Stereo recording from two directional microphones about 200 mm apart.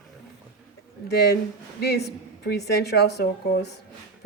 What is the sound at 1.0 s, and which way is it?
A woman's voice, 55° left (ahead or behind).